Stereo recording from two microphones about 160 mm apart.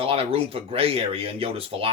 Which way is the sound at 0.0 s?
35° right (ahead or behind).